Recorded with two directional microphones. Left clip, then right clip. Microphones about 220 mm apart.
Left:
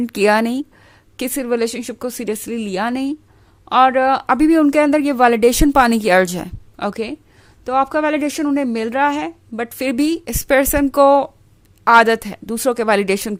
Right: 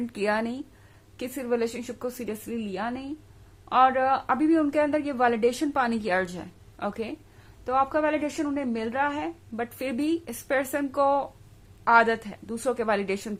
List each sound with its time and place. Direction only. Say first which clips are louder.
0.1 s speech: left 13 dB; 50° left (ahead or behind)